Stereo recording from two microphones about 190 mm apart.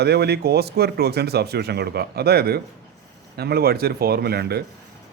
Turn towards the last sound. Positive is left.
turn(degrees=-55)  # may be behind; listen again after turning